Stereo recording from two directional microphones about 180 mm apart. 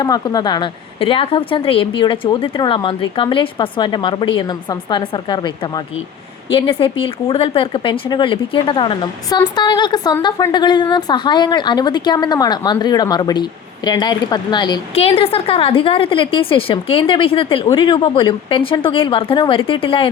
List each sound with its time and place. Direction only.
0.0 s speech: 20° left (ahead or behind)